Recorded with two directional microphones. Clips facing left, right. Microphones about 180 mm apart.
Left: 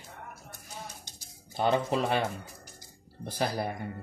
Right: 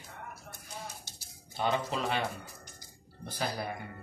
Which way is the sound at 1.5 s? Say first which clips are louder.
Left 5 dB; 50° left (ahead or behind).